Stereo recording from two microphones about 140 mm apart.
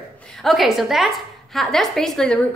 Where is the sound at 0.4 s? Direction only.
Centre (ahead or behind).